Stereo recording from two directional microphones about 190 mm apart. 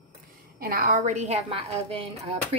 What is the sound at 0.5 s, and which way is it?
A woman's voice, 50° right (ahead or behind).